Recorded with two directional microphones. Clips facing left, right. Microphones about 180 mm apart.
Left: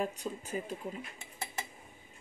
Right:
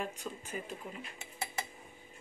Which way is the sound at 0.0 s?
40° left (ahead or behind).